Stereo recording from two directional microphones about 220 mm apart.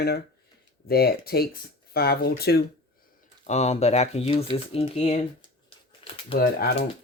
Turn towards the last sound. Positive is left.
turn(degrees=40)  # may be behind; listen again after turning